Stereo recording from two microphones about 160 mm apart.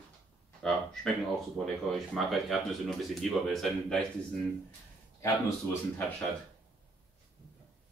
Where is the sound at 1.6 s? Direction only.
Centre (ahead or behind).